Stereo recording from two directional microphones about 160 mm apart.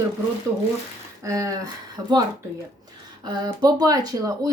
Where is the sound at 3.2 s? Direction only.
25° right (ahead or behind).